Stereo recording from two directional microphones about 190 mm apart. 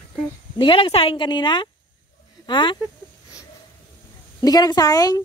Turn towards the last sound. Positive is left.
turn(degrees=20)  # may be behind; listen again after turning